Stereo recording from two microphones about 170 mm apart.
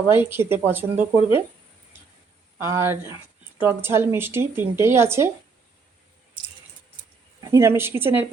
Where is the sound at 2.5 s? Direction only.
15° right (ahead or behind).